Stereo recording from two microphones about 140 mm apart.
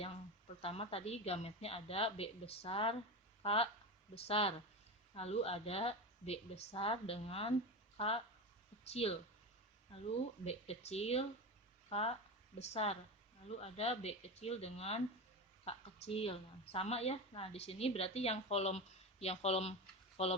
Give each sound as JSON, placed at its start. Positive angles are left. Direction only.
{"t": 0.6, "sound": "a woman's voice", "side_deg": 45}